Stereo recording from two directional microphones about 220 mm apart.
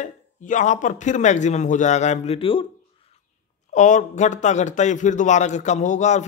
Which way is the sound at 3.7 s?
35° left (ahead or behind).